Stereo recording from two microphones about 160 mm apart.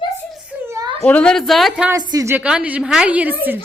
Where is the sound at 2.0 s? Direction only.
25° right (ahead or behind).